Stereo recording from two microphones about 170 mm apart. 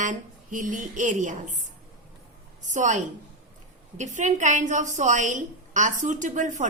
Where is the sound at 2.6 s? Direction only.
45° right (ahead or behind).